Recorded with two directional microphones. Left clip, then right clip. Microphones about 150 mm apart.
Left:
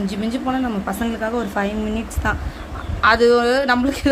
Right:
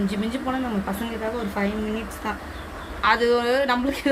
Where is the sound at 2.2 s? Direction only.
65° left (ahead or behind).